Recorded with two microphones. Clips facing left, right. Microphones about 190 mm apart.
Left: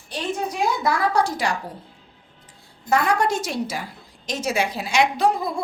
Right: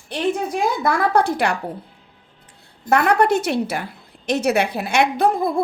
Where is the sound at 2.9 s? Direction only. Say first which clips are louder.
Right 4 dB; 65° right (ahead or behind).